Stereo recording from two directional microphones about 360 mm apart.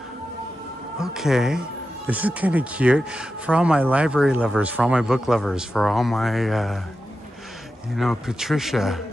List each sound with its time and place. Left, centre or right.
0.9 s speech: centre
7.9 s speech: centre